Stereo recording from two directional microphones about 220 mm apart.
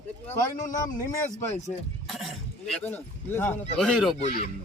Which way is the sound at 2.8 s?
10° left (ahead or behind).